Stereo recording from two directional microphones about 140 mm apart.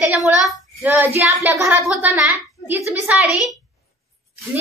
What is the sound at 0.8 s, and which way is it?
Child singing, 15° right (ahead or behind).